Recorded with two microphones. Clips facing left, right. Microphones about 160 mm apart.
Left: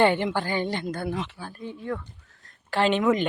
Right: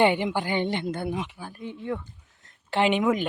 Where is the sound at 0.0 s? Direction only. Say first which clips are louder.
Even; 15° right (ahead or behind).